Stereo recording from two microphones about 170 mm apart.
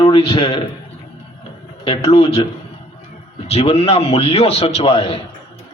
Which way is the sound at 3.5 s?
35° left (ahead or behind).